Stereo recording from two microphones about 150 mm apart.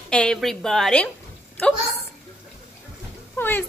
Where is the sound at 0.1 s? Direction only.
5° left (ahead or behind).